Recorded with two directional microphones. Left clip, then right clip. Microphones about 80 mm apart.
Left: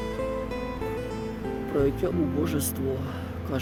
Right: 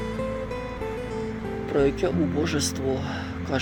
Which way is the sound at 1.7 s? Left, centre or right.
Left.